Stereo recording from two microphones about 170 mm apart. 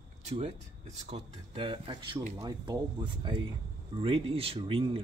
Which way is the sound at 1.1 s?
30° right (ahead or behind).